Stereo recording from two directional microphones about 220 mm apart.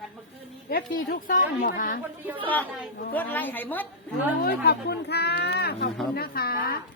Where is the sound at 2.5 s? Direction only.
5° left (ahead or behind).